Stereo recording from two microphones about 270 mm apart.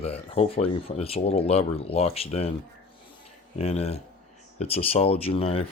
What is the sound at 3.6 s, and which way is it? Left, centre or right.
Speech, left.